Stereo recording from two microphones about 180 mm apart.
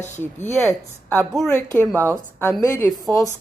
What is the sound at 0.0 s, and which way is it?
Speech, 15° left (ahead or behind).